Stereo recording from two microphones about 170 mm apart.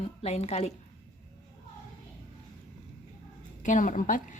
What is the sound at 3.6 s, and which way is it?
Speech, 50° left (ahead or behind).